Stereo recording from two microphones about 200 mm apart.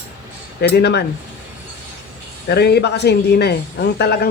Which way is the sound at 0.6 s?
55° left (ahead or behind).